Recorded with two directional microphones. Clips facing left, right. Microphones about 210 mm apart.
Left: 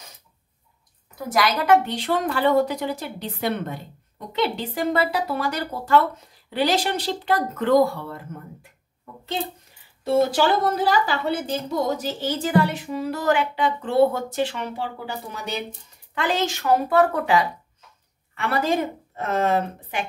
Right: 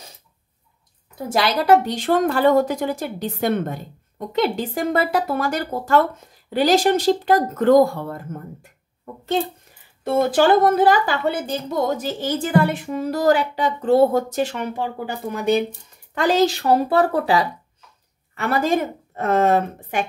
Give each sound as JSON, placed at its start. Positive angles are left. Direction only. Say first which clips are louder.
{"t": 1.1, "sound": "a woman's voice", "louder": "right 2 dB", "side_deg": -30}
{"t": 10.0, "sound": "a woman's voice", "louder": "right 3 dB", "side_deg": -55}
{"t": 16.2, "sound": "a woman's voice", "louder": "right 7 dB", "side_deg": -40}
{"t": 19.1, "sound": "a woman's voice", "louder": "right 5 dB", "side_deg": -50}